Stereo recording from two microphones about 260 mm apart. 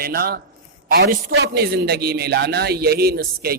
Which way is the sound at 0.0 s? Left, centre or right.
Right.